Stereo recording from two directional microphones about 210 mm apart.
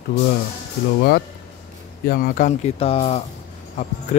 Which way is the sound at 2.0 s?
45° left (ahead or behind).